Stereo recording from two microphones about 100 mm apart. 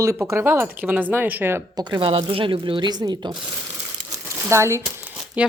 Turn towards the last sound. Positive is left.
turn(degrees=-10)  # may be behind; listen again after turning